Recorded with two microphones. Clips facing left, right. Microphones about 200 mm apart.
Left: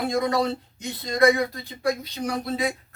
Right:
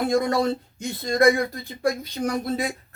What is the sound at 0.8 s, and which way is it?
Speech, 50° right (ahead or behind).